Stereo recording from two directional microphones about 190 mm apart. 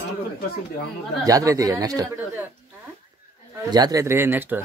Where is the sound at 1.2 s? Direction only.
15° right (ahead or behind).